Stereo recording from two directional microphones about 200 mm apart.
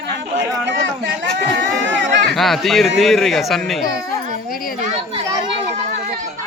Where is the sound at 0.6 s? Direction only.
65° right (ahead or behind).